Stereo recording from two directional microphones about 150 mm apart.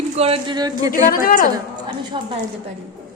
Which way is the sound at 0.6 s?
25° right (ahead or behind).